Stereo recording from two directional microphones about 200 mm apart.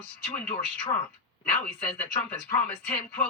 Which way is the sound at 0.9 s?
20° left (ahead or behind).